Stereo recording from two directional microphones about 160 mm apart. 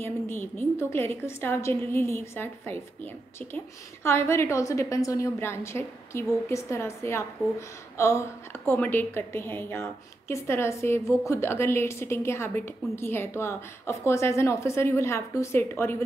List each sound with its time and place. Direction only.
0.0 s a woman's voice: 15° left (ahead or behind)